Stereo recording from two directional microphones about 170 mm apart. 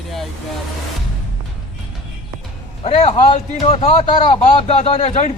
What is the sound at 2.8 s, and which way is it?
A man's voice, 35° left (ahead or behind).